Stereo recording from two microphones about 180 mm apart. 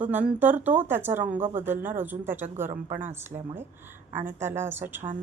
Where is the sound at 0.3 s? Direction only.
10° right (ahead or behind).